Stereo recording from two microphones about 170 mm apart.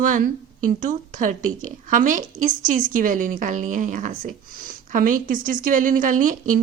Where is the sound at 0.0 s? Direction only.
50° right (ahead or behind).